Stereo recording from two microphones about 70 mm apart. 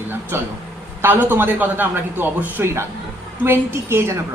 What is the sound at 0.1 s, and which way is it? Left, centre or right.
A man's voice, right.